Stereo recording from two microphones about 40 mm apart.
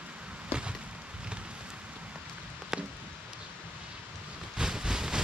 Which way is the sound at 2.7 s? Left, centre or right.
Centre.